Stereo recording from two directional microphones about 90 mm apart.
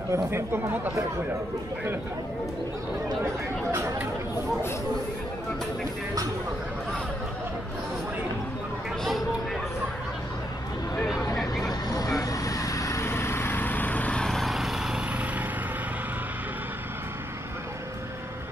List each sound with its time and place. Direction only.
0.1 s speech: 25° right (ahead or behind)
11.3 s vehicle: 5° left (ahead or behind)
11.9 s vehicle: 40° left (ahead or behind); by 15.0 s 5° right (ahead or behind)